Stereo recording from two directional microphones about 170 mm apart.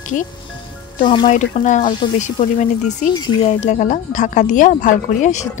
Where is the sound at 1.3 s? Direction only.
50° left (ahead or behind).